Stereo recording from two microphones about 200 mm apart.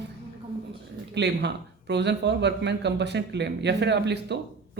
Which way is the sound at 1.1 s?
60° right (ahead or behind).